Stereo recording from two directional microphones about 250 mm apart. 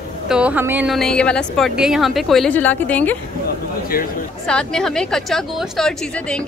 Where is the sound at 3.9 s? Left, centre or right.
Left.